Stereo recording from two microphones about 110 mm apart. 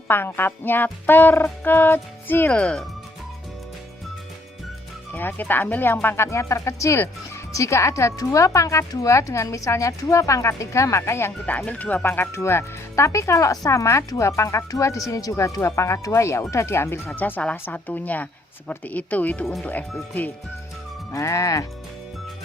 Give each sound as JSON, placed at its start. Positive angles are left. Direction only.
{"t": 0.1, "sound": "speech", "side_deg": 20}
{"t": 5.1, "sound": "speech", "side_deg": 15}
{"t": 21.1, "sound": "speech", "side_deg": 25}